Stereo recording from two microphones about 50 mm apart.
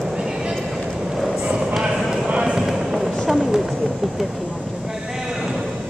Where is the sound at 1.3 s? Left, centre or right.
Centre.